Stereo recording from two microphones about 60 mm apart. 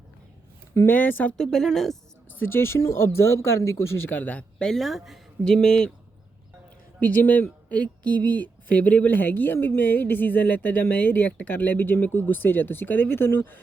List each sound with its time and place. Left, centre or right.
0.9 s speech: left
1.4 s speech: centre
2.4 s speech: left
4.6 s speech: centre
5.5 s speech: centre
7.0 s speech: left